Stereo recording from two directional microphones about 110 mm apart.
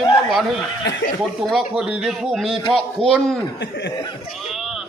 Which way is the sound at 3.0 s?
55° right (ahead or behind).